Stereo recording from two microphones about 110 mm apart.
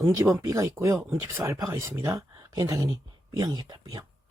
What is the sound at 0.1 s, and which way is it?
Speech, 30° right (ahead or behind).